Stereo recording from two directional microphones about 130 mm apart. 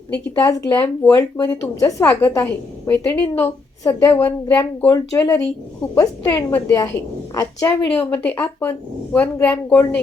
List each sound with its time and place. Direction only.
0.3 s a woman's voice: 20° left (ahead or behind)
1.4 s a woman's voice: 25° left (ahead or behind)
2.0 s a woman's voice: 15° left (ahead or behind)
4.9 s a woman's voice: 25° left (ahead or behind)
7.9 s a woman's voice: 10° left (ahead or behind)